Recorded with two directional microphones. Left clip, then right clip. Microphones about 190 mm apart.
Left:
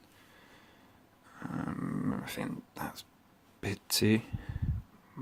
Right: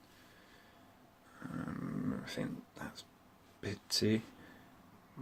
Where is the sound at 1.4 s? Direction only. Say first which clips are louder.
Left 5 dB; 40° left (ahead or behind).